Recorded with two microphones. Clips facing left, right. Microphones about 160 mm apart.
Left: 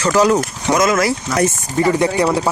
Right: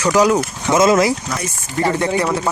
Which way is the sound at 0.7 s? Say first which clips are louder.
Right 2 dB; 25° right (ahead or behind).